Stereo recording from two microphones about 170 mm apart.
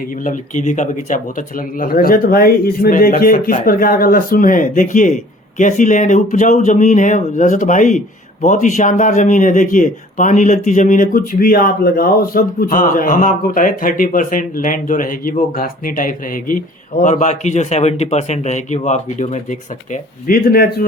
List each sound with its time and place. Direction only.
0.0 s speech: 50° left (ahead or behind)